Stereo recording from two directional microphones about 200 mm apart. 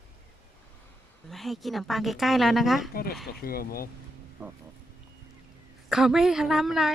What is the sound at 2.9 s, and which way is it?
Speech, 50° left (ahead or behind).